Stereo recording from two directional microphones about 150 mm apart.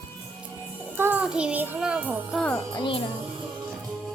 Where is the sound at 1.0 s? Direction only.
10° right (ahead or behind).